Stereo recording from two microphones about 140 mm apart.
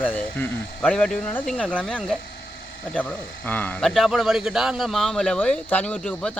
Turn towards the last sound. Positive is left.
turn(degrees=10)  # may be behind; listen again after turning